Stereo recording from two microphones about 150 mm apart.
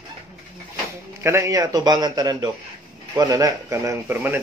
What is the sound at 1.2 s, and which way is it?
Speech, 20° right (ahead or behind).